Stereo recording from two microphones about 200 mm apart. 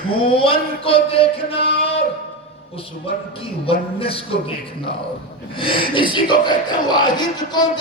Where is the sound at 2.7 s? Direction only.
30° left (ahead or behind).